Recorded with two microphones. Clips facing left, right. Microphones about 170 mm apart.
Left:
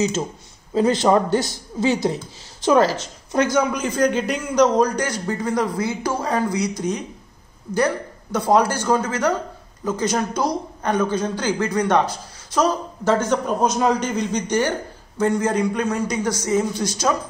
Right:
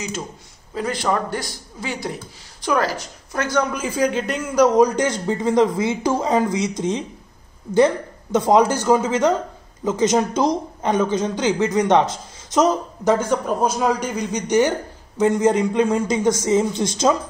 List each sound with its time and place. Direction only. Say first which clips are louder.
0.7 s a man's voice: left 6 dB; 25° left (ahead or behind)
3.5 s speech: left 1 dB; centre (ahead or behind); by 17.2 s 25° right (ahead or behind)